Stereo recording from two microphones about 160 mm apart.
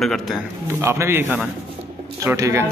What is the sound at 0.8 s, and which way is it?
A man's voice, 15° right (ahead or behind).